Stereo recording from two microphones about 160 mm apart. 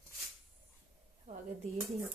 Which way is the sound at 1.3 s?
45° right (ahead or behind).